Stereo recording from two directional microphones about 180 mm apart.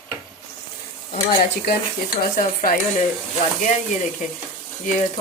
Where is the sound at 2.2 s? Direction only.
50° left (ahead or behind).